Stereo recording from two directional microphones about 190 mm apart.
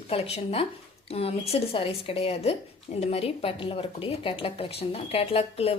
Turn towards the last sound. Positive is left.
turn(degrees=30)  # may be behind; listen again after turning